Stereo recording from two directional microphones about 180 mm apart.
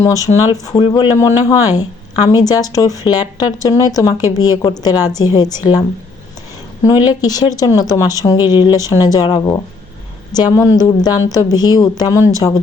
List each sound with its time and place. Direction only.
0.0 s speech: 20° left (ahead or behind)
6.8 s speech: 20° left (ahead or behind)